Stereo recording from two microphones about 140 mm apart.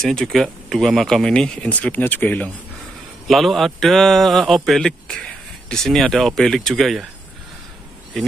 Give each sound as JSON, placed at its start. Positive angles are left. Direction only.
{"t": 0.0, "sound": "speech", "side_deg": 5}
{"t": 3.3, "sound": "speech", "side_deg": 0}